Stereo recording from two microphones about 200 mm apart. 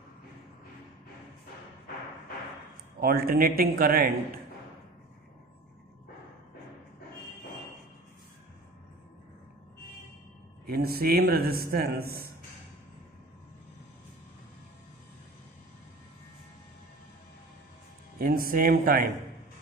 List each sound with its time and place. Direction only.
3.0 s a man's voice: 50° right (ahead or behind)
10.7 s a man's voice: 50° right (ahead or behind)
18.2 s a man's voice: 45° right (ahead or behind)